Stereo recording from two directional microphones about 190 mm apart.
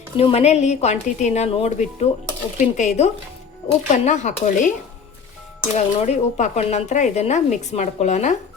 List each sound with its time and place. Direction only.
0.2 s speech: 30° left (ahead or behind)
5.7 s speech: 40° left (ahead or behind)